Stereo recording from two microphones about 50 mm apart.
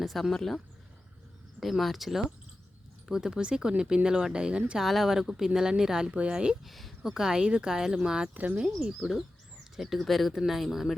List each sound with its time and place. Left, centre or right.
0.0 s speech: centre
1.6 s speech: centre
3.1 s speech: centre
4.8 s speech: centre
6.1 s speech: right
6.7 s speech: centre
8.3 s speech: right
8.8 s speech: centre